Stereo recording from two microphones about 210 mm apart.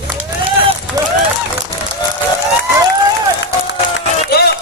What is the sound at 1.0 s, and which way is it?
Run, 15° right (ahead or behind).